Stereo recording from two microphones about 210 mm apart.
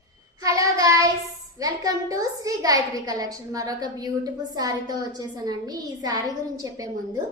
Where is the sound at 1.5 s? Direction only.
15° right (ahead or behind).